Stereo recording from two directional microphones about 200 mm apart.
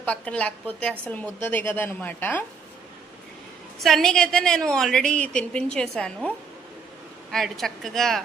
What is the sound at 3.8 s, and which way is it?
Speech, centre (ahead or behind).